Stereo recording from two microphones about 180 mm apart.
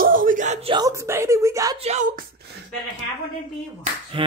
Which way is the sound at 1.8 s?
45° right (ahead or behind).